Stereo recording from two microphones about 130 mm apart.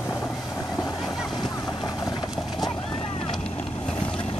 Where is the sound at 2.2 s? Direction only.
Centre (ahead or behind).